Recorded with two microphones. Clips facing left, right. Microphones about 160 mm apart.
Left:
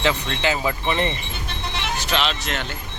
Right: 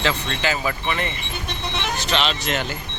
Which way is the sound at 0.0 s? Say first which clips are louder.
Left 1 dB; 15° left (ahead or behind).